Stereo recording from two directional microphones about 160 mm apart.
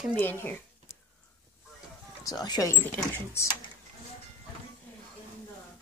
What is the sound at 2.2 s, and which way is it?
Speech, 25° left (ahead or behind).